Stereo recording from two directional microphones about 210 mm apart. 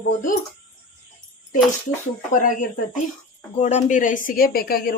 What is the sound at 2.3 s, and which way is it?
Speech, 40° left (ahead or behind).